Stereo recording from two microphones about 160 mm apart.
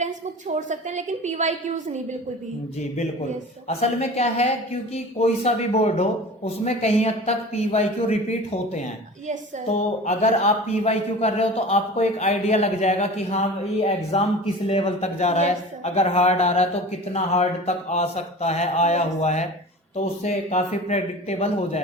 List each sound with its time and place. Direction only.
0.0 s a woman's voice: 50° right (ahead or behind)
3.7 s speech: 40° left (ahead or behind)